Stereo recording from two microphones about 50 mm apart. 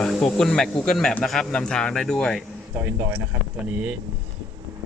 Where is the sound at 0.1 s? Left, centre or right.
Centre.